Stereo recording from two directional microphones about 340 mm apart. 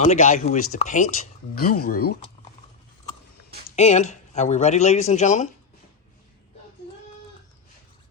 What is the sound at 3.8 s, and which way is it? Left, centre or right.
Speech, centre.